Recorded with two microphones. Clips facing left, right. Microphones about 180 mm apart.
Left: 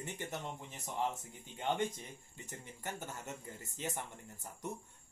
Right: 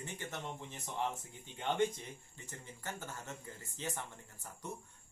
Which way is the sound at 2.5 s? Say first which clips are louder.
Left 1 dB; 20° left (ahead or behind).